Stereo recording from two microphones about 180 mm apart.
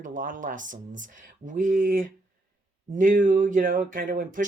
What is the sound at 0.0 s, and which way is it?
Speech, 45° right (ahead or behind).